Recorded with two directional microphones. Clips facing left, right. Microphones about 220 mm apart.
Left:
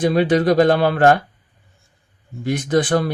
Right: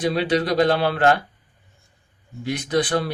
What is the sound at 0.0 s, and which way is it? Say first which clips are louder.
Speech: left 5 dB; 50° left (ahead or behind).